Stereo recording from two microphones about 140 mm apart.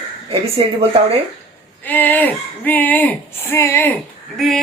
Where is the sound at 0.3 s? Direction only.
45° right (ahead or behind).